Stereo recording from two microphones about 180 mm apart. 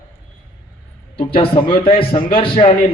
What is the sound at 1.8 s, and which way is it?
Speech, 30° left (ahead or behind).